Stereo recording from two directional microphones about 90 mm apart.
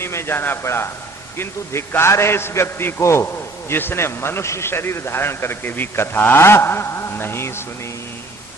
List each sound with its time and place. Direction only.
0.0 s a man's voice: 30° left (ahead or behind)